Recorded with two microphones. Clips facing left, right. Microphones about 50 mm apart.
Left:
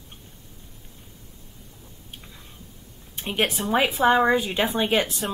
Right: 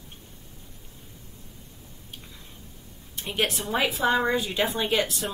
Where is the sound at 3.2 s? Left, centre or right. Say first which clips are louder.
Left 3 dB; left.